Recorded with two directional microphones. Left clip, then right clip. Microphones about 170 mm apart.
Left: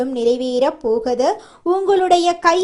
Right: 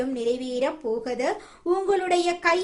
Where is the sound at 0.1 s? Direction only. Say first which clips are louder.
Left 9 dB; 30° left (ahead or behind).